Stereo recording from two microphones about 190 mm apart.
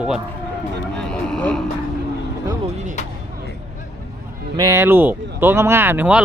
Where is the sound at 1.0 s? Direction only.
5° left (ahead or behind).